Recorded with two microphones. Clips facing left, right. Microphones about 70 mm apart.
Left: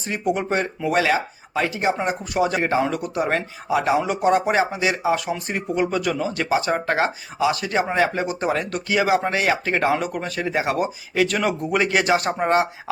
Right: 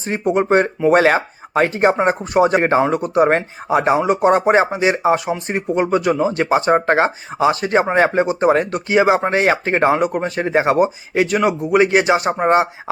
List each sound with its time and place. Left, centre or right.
0.0 s speech: right